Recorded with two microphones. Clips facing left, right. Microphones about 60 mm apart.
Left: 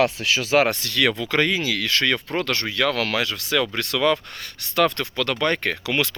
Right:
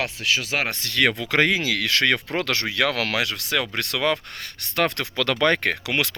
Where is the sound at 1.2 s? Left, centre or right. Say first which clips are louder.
Right 1 dB; right.